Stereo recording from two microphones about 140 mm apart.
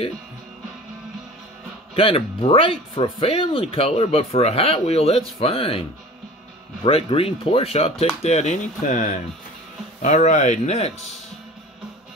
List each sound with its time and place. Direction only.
2.0 s speech: 40° left (ahead or behind)